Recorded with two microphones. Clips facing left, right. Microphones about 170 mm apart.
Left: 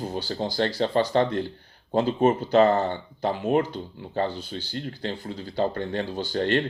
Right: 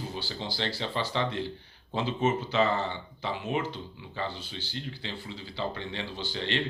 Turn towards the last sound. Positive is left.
turn(degrees=45)  # may be behind; listen again after turning